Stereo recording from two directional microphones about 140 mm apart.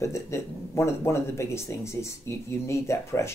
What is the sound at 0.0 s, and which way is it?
Speech, 20° left (ahead or behind).